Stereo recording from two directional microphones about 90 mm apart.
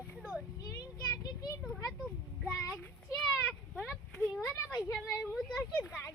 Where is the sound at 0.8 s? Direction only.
45° left (ahead or behind).